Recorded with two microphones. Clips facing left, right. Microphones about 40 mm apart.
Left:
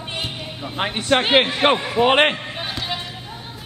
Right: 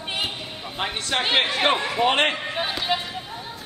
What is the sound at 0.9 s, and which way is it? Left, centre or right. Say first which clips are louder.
Speech: left 6 dB; centre.